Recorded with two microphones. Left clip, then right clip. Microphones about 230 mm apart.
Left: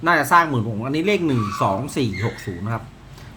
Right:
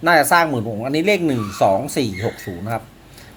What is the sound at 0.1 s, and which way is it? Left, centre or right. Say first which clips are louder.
Speech: right 2 dB; centre.